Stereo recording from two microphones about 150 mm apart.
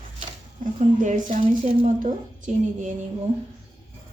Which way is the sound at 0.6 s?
55° right (ahead or behind).